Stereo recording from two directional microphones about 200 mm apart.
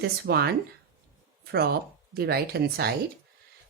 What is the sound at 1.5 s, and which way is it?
Speech, 50° right (ahead or behind).